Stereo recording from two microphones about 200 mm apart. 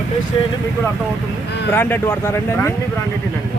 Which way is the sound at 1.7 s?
10° left (ahead or behind).